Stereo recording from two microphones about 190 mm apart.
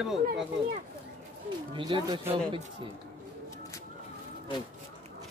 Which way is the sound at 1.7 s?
25° right (ahead or behind).